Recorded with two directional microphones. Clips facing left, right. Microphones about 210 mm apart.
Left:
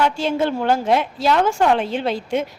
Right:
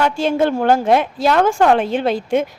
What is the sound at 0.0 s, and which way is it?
A woman's voice, 50° right (ahead or behind).